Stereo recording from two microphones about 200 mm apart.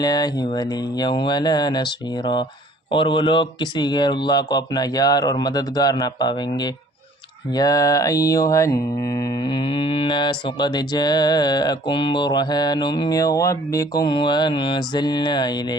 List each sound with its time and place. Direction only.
0.0 s mantra: 20° left (ahead or behind)